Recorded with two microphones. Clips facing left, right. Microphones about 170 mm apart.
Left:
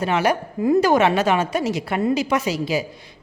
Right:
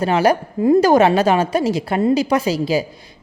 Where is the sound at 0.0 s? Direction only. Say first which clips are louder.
Right 4 dB; 35° right (ahead or behind).